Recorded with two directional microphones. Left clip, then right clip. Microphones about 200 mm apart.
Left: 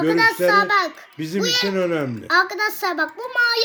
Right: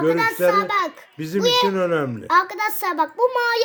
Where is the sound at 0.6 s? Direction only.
55° right (ahead or behind).